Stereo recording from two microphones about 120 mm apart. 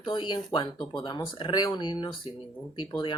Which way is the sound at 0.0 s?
40° left (ahead or behind).